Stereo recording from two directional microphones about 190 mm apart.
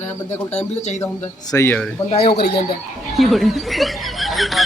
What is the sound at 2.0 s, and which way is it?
Speech, 30° left (ahead or behind).